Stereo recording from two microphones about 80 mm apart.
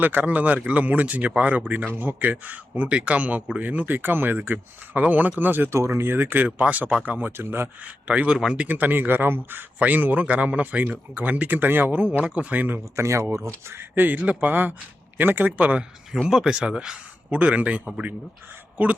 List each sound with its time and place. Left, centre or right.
0.0 s a man's voice: right
5.7 s a man's voice: right
8.0 s a man's voice: centre